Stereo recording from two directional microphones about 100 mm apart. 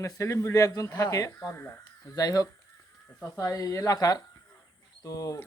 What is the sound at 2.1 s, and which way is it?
Speech, 40° left (ahead or behind).